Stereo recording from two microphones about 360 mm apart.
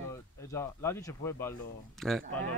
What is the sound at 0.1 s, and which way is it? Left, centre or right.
A man's voice, centre.